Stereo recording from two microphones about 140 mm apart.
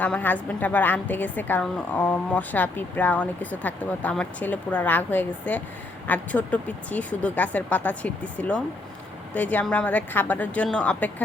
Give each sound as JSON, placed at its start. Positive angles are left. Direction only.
{"t": 0.0, "sound": "a woman's voice", "side_deg": 10}